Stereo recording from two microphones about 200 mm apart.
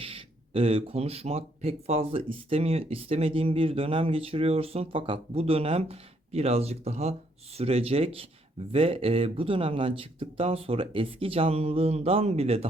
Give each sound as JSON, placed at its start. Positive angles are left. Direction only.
{"t": 0.0, "sound": "speech", "side_deg": -25}